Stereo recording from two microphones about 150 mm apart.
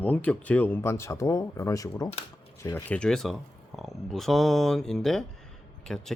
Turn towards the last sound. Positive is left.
turn(degrees=5)  # may be behind; listen again after turning